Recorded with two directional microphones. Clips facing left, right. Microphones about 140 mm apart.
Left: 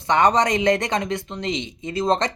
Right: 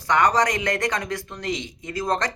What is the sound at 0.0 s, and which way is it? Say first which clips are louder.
Speech: left 2 dB; 25° left (ahead or behind).